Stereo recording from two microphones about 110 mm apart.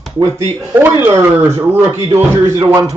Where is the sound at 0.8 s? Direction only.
20° right (ahead or behind).